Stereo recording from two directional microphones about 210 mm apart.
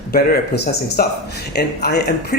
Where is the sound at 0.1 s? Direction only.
50° left (ahead or behind).